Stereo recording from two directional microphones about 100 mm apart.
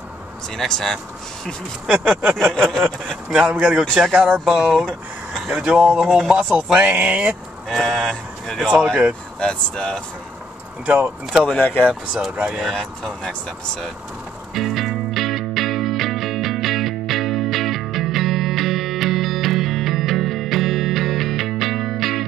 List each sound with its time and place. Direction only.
0.6 s speech: 5° left (ahead or behind)
1.9 s speech: 15° right (ahead or behind)
6.2 s speech: 10° right (ahead or behind)
7.6 s speech: centre (ahead or behind)
10.9 s speech: 10° right (ahead or behind)
11.5 s speech: 20° left (ahead or behind)
11.8 s speech: 5° right (ahead or behind)
14.5 s music: centre (ahead or behind)